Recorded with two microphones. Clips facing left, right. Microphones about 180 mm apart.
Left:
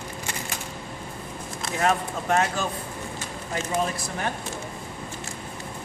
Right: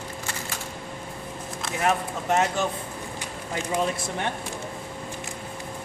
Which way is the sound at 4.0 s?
25° right (ahead or behind).